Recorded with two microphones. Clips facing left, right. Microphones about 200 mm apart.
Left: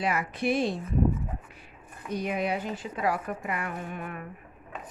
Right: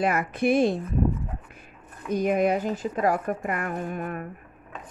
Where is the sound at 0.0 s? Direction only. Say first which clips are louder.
Right 5 dB; 50° right (ahead or behind).